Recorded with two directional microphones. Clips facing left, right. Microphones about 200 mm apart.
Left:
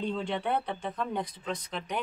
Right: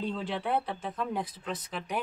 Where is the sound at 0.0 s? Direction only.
Centre (ahead or behind).